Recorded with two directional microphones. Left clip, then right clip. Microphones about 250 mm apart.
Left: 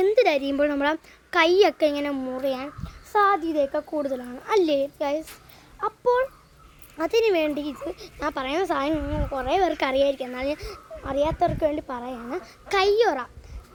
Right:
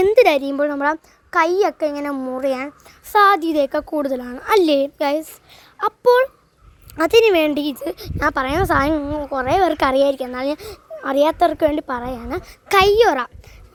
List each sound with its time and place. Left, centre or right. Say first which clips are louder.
0.0 s a sound: right 7 dB; right
0.4 s a child's voice: right 4 dB; centre
2.0 s speech: right 5 dB; right